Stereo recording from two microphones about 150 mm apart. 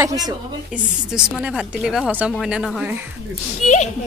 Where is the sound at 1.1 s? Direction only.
5° right (ahead or behind).